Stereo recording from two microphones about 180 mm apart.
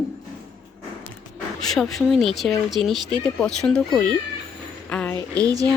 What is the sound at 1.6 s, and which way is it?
Speech, centre (ahead or behind).